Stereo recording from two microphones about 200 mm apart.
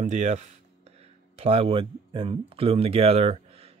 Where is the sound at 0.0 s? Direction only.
35° right (ahead or behind).